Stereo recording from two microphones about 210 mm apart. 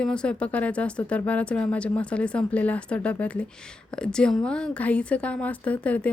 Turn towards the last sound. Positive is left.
turn(degrees=5)  # may be behind; listen again after turning